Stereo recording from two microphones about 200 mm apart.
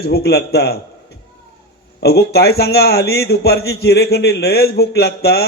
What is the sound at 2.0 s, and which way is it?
A man's voice, 55° left (ahead or behind).